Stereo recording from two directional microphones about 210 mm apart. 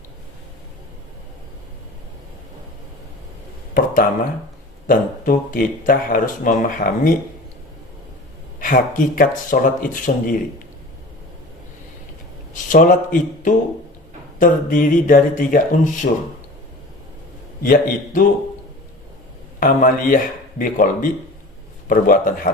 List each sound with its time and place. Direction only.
4.9 s speech: 40° left (ahead or behind)
8.5 s speech: 40° left (ahead or behind)
12.6 s speech: 40° left (ahead or behind)
17.6 s speech: 40° left (ahead or behind)
19.5 s a man's voice: 40° left (ahead or behind)